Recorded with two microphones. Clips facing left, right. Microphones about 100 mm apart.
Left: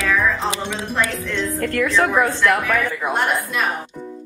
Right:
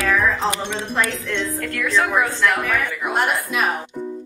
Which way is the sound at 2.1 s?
Centre (ahead or behind).